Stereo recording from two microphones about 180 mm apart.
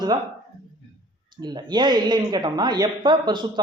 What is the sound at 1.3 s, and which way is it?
Speech, 25° right (ahead or behind).